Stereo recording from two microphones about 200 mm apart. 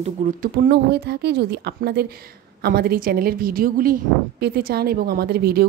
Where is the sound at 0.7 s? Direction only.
55° right (ahead or behind).